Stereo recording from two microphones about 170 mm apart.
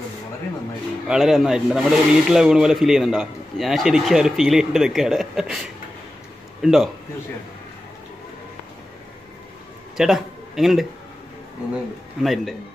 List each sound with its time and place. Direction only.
1.0 s speech: 5° right (ahead or behind)
9.9 s speech: centre (ahead or behind)
12.2 s speech: centre (ahead or behind)